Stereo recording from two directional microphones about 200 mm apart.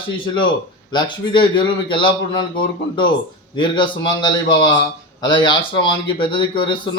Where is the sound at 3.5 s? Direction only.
25° left (ahead or behind).